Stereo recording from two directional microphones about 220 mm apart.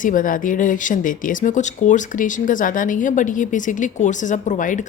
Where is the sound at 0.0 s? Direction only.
35° left (ahead or behind).